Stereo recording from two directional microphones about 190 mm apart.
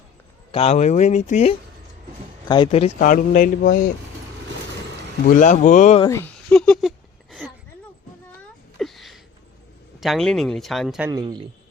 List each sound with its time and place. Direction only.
0.5 s speech: 35° left (ahead or behind)
3.0 s speech: 45° left (ahead or behind)
5.3 s speech: 40° left (ahead or behind)
6.0 s speech: 15° left (ahead or behind)
6.5 s a sound: 5° left (ahead or behind)
8.8 s a sound: centre (ahead or behind)
10.0 s speech: centre (ahead or behind)
11.1 s speech: 20° right (ahead or behind)